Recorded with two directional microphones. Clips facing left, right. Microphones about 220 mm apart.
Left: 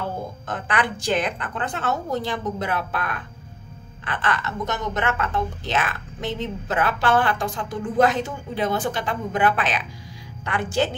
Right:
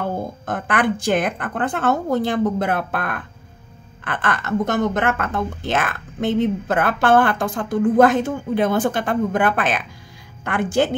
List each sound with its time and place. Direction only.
0.5 s a woman's voice: 50° right (ahead or behind)